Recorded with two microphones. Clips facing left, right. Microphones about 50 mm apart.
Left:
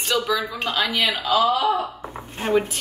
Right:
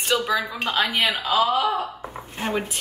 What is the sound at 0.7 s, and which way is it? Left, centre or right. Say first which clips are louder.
Speech: right 1 dB; right.